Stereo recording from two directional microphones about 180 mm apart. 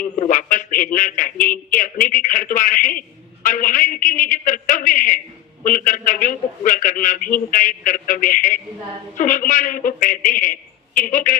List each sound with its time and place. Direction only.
0.2 s a man's voice: 50° left (ahead or behind)